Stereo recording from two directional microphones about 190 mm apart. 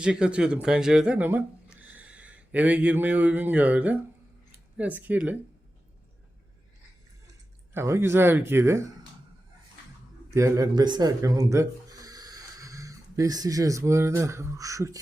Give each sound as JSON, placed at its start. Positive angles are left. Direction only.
{"t": 0.0, "sound": "speech", "side_deg": -5}
{"t": 7.7, "sound": "speech", "side_deg": -15}
{"t": 10.3, "sound": "speech", "side_deg": -15}